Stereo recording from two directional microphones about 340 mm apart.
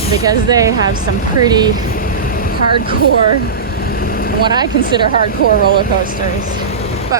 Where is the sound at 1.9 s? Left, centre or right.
Left.